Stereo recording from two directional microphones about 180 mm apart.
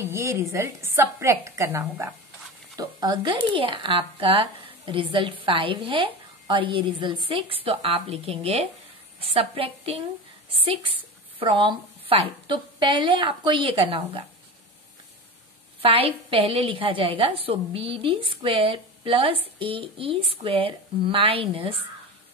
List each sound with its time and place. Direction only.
0.0 s a woman's voice: 15° right (ahead or behind)
15.8 s a woman's voice: 30° right (ahead or behind)